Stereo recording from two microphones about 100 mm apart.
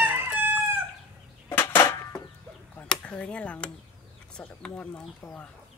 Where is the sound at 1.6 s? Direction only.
25° left (ahead or behind).